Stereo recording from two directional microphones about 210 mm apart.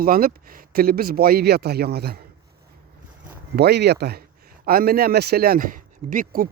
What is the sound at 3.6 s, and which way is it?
Speech, 50° right (ahead or behind).